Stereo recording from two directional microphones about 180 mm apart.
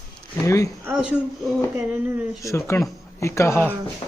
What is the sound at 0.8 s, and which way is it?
Speech, 5° right (ahead or behind).